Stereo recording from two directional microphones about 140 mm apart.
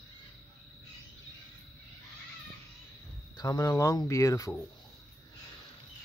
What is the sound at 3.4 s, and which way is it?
Speech, 25° left (ahead or behind).